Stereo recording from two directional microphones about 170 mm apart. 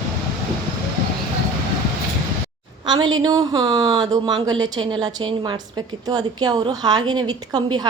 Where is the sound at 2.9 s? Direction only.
25° right (ahead or behind).